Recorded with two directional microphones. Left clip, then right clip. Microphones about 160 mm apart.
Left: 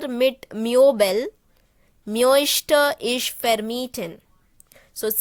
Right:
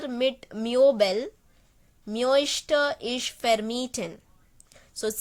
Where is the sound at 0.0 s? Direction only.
35° left (ahead or behind).